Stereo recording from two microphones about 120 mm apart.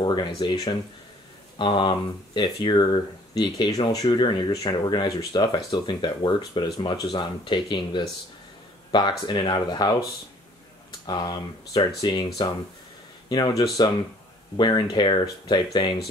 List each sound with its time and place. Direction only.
0.0 s speech: 35° left (ahead or behind)
11.1 s speech: 35° left (ahead or behind)
13.3 s speech: 35° left (ahead or behind)